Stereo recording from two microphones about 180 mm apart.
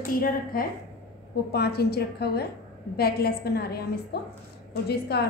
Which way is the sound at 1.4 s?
60° left (ahead or behind).